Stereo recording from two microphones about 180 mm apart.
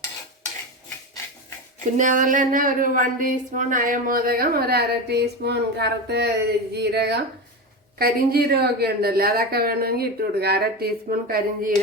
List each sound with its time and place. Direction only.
2.0 s a woman's voice: 45° right (ahead or behind)